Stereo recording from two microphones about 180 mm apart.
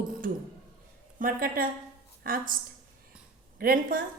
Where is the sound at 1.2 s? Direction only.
55° right (ahead or behind).